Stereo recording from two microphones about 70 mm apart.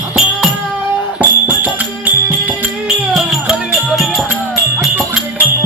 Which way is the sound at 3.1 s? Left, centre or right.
Centre.